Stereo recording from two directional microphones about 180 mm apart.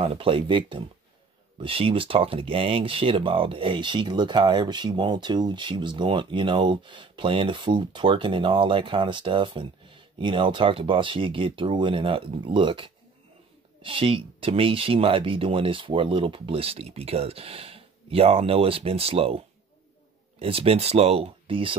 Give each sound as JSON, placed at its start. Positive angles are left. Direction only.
{"t": 0.0, "sound": "speech", "side_deg": -30}